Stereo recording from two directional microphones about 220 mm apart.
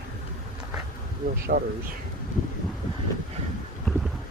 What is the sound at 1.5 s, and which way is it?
Speech, 40° right (ahead or behind).